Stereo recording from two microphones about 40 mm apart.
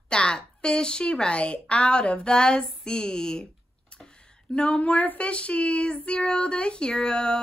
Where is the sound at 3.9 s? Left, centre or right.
Left.